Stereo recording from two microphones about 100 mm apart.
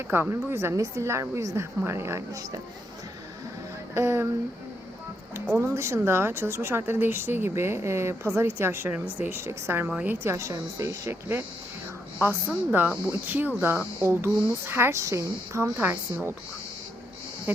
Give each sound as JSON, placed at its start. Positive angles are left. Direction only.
{"t": 0.1, "sound": "speech", "side_deg": -20}
{"t": 3.9, "sound": "speech", "side_deg": -25}
{"t": 5.3, "sound": "speech", "side_deg": -25}
{"t": 10.2, "sound": "speech", "side_deg": -30}